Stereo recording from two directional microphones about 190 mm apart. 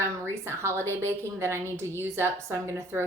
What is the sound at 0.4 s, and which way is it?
Speech, 15° right (ahead or behind).